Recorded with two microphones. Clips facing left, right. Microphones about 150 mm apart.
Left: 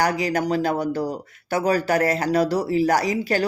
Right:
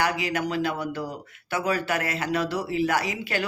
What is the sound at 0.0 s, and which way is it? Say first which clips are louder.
Speech: left 4 dB; 40° left (ahead or behind).